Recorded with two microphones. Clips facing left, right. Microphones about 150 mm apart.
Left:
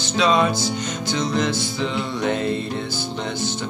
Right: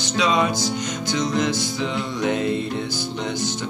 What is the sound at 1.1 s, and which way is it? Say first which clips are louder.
Music: even; 15° right (ahead or behind).